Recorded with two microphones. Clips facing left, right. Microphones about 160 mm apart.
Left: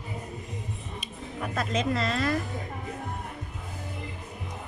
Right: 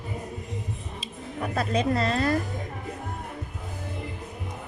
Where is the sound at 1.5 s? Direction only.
35° right (ahead or behind).